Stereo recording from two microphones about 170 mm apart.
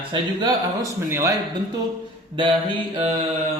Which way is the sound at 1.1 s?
15° right (ahead or behind).